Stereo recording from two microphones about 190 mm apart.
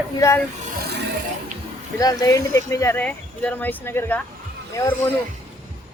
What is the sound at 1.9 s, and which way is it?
Speech, 20° left (ahead or behind).